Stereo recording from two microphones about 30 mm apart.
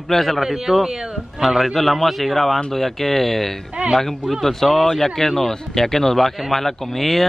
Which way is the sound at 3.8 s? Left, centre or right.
Right.